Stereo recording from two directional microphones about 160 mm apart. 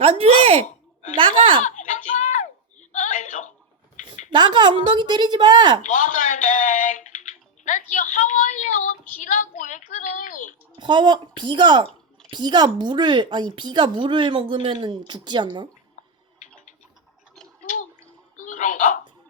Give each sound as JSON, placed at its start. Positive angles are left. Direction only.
{"t": 0.0, "sound": "speech", "side_deg": -35}
{"t": 1.6, "sound": "a sound", "side_deg": 50}
{"t": 4.1, "sound": "speech", "side_deg": -30}
{"t": 5.8, "sound": "a woman's voice", "side_deg": 50}
{"t": 10.8, "sound": "speech", "side_deg": -30}
{"t": 17.6, "sound": "a sound", "side_deg": 50}